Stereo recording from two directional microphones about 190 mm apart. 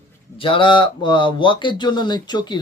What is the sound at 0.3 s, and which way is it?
Speech, 25° left (ahead or behind).